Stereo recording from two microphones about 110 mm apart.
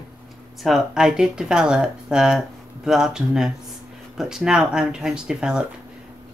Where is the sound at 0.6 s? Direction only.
5° right (ahead or behind).